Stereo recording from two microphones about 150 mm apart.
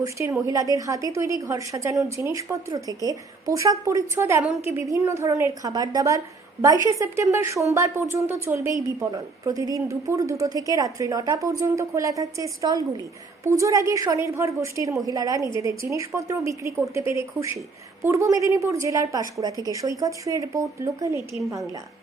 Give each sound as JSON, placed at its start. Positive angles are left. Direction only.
{"t": 0.0, "sound": "a woman's voice", "side_deg": -20}